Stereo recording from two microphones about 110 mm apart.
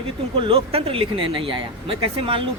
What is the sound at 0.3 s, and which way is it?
Speech, 55° right (ahead or behind).